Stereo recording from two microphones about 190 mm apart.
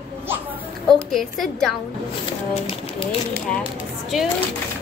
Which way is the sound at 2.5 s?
30° left (ahead or behind).